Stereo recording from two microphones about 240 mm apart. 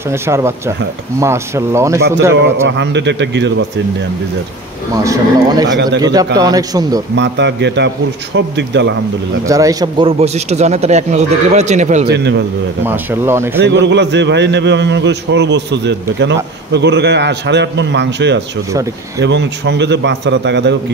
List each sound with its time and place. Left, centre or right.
0.1 s speech: centre
2.7 s a man's voice: right
4.9 s speech: centre
7.2 s a man's voice: right
9.5 s a man's voice: centre; by 12.1 s right
12.1 s a man's voice: right
12.8 s speech: centre
13.6 s a man's voice: right